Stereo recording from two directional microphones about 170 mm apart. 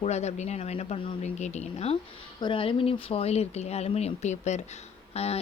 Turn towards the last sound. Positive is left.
turn(degrees=40)  # may be behind; listen again after turning